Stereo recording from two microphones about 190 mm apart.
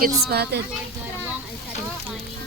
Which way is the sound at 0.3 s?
55° right (ahead or behind).